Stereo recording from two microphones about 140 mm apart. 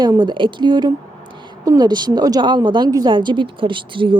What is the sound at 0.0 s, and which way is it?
Speech, 30° right (ahead or behind).